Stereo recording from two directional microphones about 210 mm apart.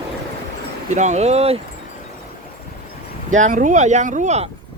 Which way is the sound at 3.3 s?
35° right (ahead or behind).